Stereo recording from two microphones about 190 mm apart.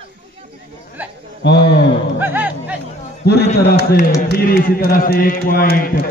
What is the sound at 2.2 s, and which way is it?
Music, 10° right (ahead or behind).